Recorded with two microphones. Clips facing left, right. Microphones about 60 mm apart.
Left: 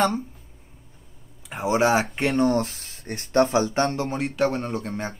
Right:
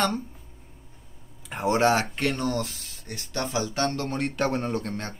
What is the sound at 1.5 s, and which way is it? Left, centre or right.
Speech, centre.